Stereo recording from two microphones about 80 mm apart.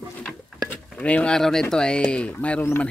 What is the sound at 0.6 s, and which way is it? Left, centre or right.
Speech, centre.